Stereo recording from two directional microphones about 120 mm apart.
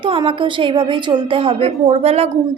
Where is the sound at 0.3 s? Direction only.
45° right (ahead or behind).